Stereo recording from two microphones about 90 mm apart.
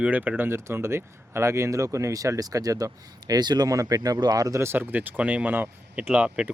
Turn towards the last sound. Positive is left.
turn(degrees=-15)  # may be behind; listen again after turning